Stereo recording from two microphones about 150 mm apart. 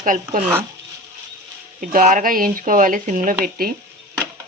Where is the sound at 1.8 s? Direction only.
60° right (ahead or behind).